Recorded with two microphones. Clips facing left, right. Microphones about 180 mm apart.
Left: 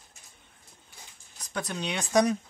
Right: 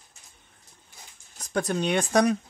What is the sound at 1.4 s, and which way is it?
Speech, 50° right (ahead or behind).